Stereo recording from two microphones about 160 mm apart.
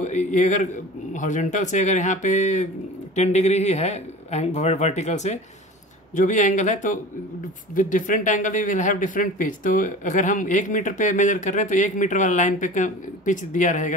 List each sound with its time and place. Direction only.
0.0 s a man's voice: 50° left (ahead or behind)